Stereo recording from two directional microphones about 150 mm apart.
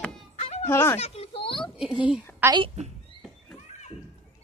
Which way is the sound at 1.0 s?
45° left (ahead or behind).